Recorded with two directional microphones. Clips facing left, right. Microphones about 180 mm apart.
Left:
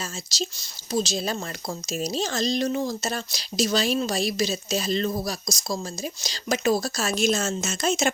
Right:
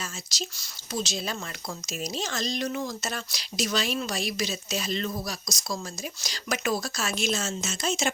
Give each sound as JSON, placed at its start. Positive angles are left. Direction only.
{"t": 0.0, "sound": "speech", "side_deg": 30}